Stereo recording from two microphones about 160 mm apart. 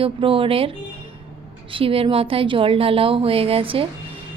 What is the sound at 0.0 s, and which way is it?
Speech, 35° right (ahead or behind).